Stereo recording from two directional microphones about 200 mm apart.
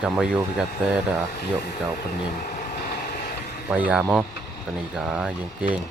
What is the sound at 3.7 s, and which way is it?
Speech, 10° right (ahead or behind).